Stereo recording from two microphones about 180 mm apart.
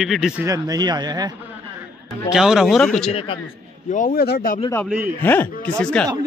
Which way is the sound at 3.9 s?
50° left (ahead or behind).